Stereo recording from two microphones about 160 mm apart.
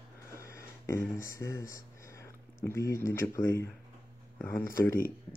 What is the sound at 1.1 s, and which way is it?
Speech, 20° left (ahead or behind).